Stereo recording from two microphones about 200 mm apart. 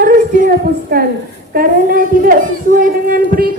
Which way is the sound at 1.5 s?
45° right (ahead or behind).